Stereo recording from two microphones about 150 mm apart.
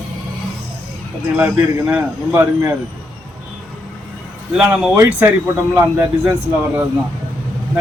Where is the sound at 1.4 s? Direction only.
10° right (ahead or behind).